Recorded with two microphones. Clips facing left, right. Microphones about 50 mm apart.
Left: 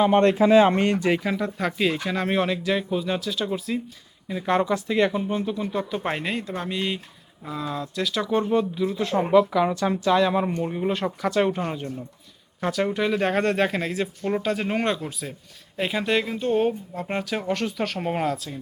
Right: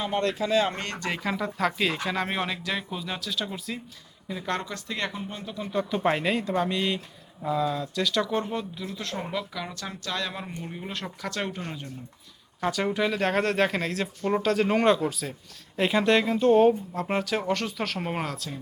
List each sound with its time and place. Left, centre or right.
0.0 s speech: left; by 9.1 s centre
9.3 s speech: left
12.5 s speech: centre